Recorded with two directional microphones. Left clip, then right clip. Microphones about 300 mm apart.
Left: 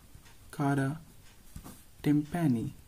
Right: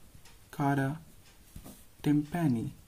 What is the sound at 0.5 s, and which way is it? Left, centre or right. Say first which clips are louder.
Speech: right 1 dB; centre.